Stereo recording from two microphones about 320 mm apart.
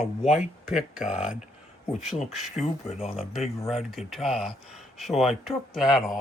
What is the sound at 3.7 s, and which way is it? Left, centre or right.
Speech, centre.